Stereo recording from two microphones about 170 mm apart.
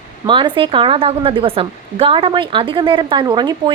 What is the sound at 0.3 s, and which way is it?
A woman's voice, 30° right (ahead or behind).